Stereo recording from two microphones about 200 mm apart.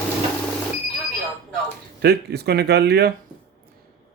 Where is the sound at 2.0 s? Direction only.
55° right (ahead or behind).